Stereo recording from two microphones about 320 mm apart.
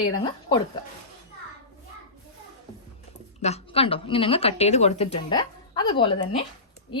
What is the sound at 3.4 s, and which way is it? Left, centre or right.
A woman's voice, centre.